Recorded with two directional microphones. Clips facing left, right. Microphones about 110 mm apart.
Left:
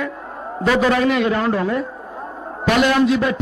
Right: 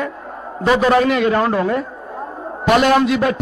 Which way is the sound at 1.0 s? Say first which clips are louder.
Right 2 dB; 50° right (ahead or behind).